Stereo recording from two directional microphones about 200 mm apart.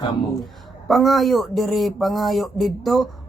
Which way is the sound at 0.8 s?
Centre (ahead or behind).